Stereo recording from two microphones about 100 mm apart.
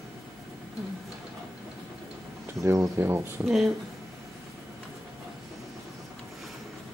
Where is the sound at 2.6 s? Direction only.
35° right (ahead or behind).